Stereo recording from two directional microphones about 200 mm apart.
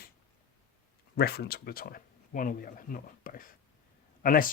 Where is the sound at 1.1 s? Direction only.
50° left (ahead or behind).